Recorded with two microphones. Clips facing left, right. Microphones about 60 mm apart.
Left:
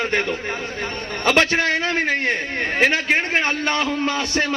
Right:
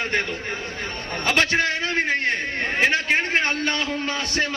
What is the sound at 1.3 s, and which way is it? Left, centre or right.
A man's voice, left.